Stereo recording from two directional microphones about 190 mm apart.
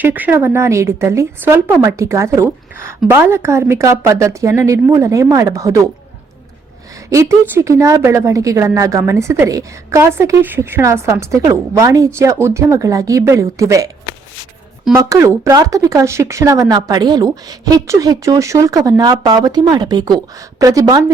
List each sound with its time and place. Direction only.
0.0 s a woman's voice: 10° right (ahead or behind)
7.1 s a woman's voice: 15° right (ahead or behind)
14.9 s speech: 15° right (ahead or behind)